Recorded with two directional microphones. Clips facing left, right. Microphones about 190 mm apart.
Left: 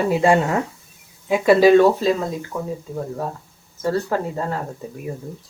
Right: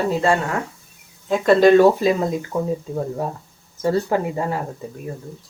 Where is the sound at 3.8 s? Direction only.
15° right (ahead or behind).